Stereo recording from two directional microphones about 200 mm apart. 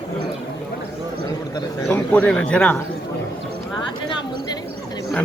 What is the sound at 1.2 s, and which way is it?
Speech, 15° left (ahead or behind).